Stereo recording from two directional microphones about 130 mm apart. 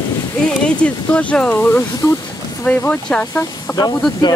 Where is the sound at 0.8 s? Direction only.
10° left (ahead or behind).